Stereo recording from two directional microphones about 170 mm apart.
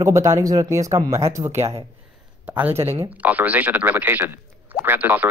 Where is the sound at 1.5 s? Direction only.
40° right (ahead or behind).